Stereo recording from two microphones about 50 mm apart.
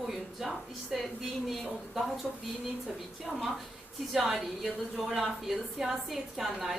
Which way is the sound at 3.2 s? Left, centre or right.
Centre.